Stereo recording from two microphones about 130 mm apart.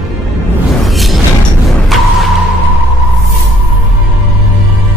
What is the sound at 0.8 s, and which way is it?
Music, centre (ahead or behind).